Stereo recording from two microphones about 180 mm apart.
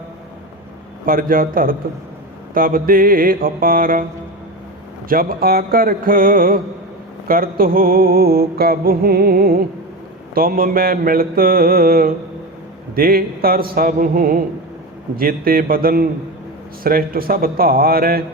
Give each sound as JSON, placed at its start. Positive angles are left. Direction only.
{"t": 1.0, "sound": "mantra", "side_deg": -50}
{"t": 5.0, "sound": "mantra", "side_deg": -50}